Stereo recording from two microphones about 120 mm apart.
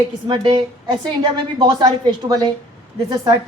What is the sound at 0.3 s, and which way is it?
A woman's voice, 35° right (ahead or behind).